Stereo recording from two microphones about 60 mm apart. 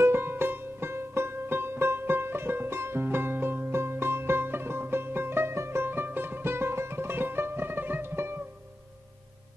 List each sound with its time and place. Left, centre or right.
0.0 s music: right